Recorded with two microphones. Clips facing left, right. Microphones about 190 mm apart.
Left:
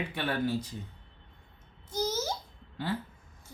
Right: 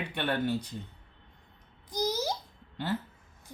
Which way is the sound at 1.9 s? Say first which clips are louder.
Right 1 dB; 15° right (ahead or behind).